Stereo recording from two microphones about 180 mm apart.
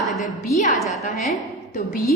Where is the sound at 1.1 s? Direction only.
Centre (ahead or behind).